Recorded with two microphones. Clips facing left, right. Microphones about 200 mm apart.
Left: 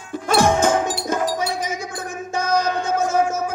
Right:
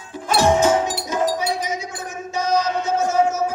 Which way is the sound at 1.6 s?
50° left (ahead or behind).